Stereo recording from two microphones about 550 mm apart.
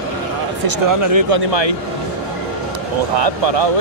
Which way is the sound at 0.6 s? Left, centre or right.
Right.